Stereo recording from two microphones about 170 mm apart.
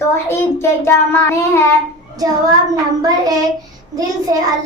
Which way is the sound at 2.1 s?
20° right (ahead or behind).